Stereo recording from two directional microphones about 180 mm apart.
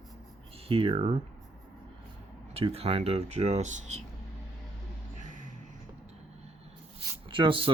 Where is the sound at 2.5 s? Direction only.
35° right (ahead or behind).